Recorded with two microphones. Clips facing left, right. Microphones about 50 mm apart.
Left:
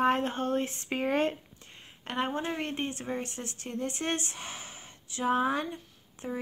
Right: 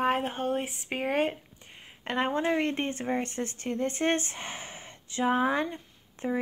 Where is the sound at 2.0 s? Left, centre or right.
Right.